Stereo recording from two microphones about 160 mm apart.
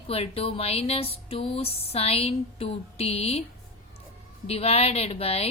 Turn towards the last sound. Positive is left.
turn(degrees=40)  # may be behind; listen again after turning